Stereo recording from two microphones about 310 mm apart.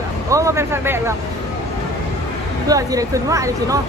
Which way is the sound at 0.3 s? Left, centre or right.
Centre.